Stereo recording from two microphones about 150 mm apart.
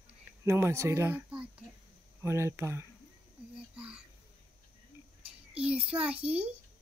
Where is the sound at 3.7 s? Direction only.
10° right (ahead or behind).